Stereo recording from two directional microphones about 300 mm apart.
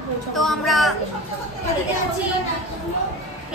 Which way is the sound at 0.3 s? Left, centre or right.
Centre.